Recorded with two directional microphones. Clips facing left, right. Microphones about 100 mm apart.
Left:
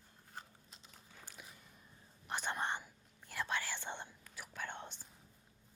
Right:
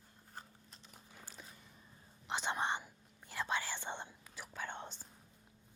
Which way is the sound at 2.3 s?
15° right (ahead or behind).